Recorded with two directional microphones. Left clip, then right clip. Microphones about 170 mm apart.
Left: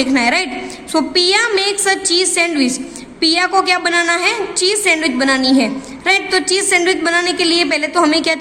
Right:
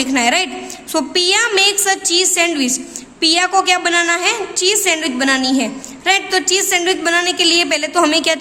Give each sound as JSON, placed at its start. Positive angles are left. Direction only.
{"t": 0.0, "sound": "a woman's voice", "side_deg": -15}